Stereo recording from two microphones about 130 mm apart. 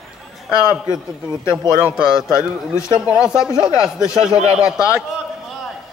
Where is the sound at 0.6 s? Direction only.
25° left (ahead or behind).